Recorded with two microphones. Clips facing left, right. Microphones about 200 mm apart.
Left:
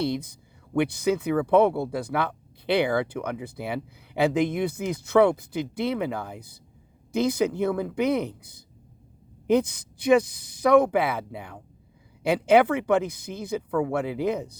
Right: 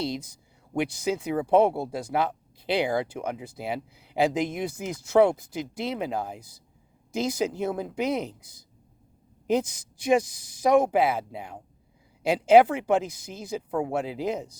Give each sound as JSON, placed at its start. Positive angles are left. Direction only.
{"t": 0.0, "sound": "speech", "side_deg": 60}